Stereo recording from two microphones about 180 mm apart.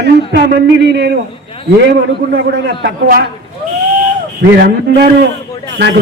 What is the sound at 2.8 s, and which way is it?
Speech, 60° right (ahead or behind).